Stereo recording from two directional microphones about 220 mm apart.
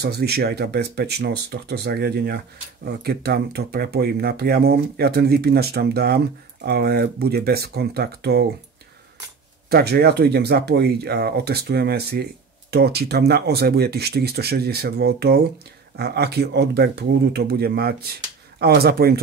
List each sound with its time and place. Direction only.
0.0 s speech: 45° right (ahead or behind)
9.7 s speech: 45° right (ahead or behind)